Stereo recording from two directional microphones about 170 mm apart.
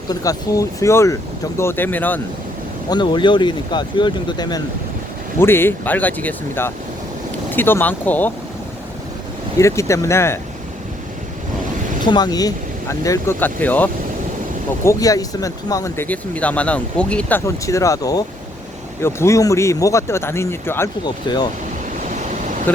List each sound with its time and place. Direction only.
0.1 s speech: 20° left (ahead or behind)
2.9 s speech: 25° left (ahead or behind)
5.4 s speech: 15° left (ahead or behind)
9.6 s speech: 15° left (ahead or behind)
12.0 s speech: 25° left (ahead or behind)
14.8 s speech: 20° left (ahead or behind)
21.0 s speech: 25° left (ahead or behind)
22.2 s vehicle: 50° right (ahead or behind)